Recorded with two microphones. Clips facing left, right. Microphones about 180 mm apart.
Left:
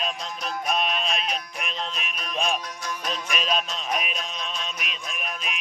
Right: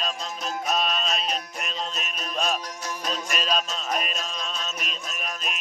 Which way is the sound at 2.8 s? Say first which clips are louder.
Even; 25° right (ahead or behind).